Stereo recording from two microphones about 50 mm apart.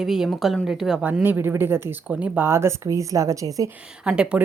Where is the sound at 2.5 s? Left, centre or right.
Right.